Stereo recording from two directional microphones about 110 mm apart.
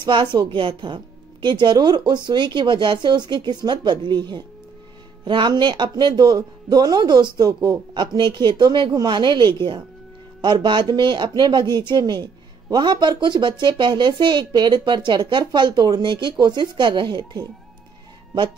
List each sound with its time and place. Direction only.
0.0 s speech: 45° right (ahead or behind)